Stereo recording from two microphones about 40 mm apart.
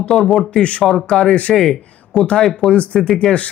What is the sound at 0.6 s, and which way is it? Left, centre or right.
Speech, left.